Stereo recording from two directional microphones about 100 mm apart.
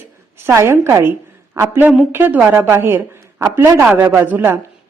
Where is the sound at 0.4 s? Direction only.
25° right (ahead or behind).